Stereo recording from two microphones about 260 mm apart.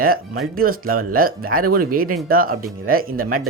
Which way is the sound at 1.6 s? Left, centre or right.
Right.